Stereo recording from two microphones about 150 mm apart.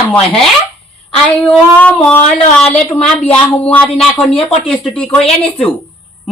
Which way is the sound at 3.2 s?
10° left (ahead or behind).